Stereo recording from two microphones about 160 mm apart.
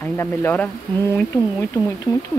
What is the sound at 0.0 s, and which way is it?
Speech, 10° left (ahead or behind).